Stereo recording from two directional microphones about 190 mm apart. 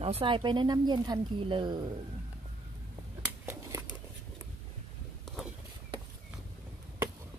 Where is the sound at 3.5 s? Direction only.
10° right (ahead or behind).